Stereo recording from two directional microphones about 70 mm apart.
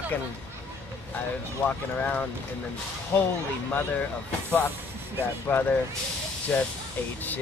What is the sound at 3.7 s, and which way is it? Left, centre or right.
Speech, left.